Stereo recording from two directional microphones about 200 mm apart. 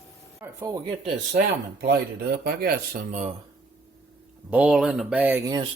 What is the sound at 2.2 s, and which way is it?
Speech, 50° right (ahead or behind).